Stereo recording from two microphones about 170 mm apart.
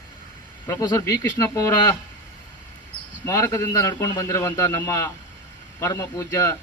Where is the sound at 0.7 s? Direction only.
20° left (ahead or behind).